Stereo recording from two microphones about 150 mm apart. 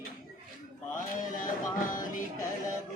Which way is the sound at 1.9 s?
60° left (ahead or behind).